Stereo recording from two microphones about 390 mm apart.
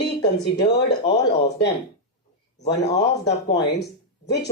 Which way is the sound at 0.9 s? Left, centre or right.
Left.